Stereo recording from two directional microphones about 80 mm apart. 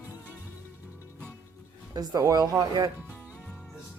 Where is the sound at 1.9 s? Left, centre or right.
Right.